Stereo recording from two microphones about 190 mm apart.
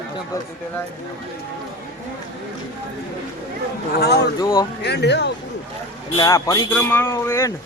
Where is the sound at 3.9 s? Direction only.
60° left (ahead or behind).